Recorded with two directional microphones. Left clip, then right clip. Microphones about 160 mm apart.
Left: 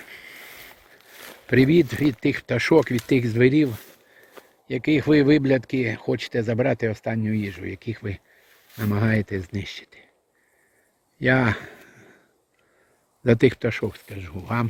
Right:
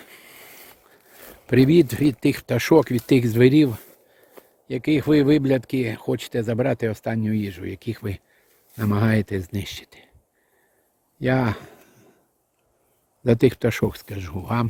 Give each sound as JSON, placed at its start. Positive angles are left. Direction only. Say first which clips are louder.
{"t": 0.0, "sound": "a sound", "louder": "left 4 dB", "side_deg": -15}
{"t": 1.2, "sound": "speech", "louder": "right 1 dB", "side_deg": -20}
{"t": 4.4, "sound": "speech", "louder": "even", "side_deg": -10}
{"t": 11.2, "sound": "a sound", "louder": "left 2 dB", "side_deg": -10}
{"t": 13.2, "sound": "speech", "louder": "even", "side_deg": -15}
{"t": 13.6, "sound": "speech", "louder": "right 3 dB", "side_deg": -35}
{"t": 14.3, "sound": "speech", "louder": "right 1 dB", "side_deg": -20}